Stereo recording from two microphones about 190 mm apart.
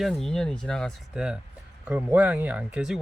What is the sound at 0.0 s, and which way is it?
Speech, centre (ahead or behind).